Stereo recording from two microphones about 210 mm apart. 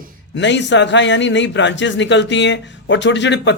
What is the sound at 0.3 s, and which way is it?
A man's voice, 55° left (ahead or behind).